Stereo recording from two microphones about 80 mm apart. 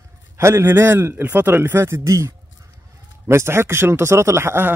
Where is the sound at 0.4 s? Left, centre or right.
Right.